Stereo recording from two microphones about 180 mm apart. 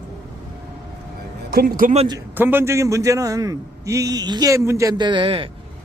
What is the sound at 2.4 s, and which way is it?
A man's voice, 10° right (ahead or behind).